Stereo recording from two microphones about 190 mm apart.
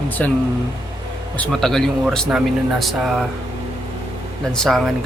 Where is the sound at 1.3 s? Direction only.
5° left (ahead or behind).